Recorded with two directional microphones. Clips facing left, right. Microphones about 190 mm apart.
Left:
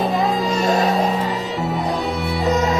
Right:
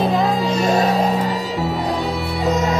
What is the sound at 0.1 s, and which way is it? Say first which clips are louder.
Music: right 1 dB; centre (ahead or behind).